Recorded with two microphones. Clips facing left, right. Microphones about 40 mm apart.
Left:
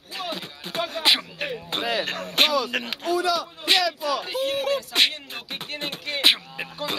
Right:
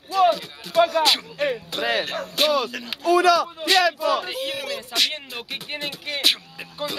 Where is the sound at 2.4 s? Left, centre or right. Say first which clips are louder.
Even; left.